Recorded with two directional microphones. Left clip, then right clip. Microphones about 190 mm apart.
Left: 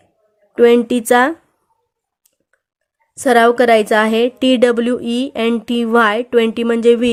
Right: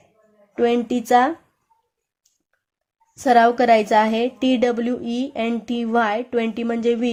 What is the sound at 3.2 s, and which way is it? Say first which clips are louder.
A woman's voice: left 4 dB; 35° left (ahead or behind).